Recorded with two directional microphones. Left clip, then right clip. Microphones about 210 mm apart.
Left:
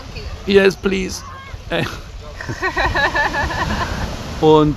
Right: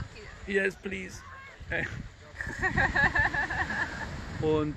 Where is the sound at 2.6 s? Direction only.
35° right (ahead or behind).